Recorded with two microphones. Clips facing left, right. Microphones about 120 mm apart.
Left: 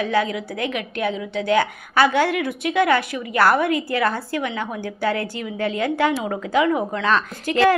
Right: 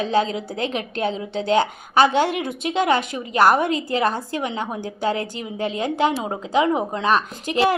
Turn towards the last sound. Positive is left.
turn(degrees=-20)  # may be behind; listen again after turning